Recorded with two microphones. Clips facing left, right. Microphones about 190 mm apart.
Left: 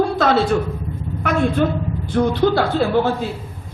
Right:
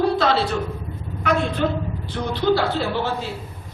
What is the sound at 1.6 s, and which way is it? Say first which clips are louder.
A man's voice: left 3 dB; 50° left (ahead or behind).